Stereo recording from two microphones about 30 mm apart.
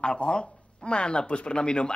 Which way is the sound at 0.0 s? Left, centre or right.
Left.